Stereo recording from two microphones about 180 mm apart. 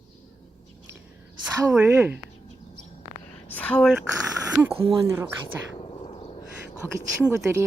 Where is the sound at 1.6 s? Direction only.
15° right (ahead or behind).